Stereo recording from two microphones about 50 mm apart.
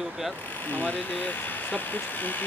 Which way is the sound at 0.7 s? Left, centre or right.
Left.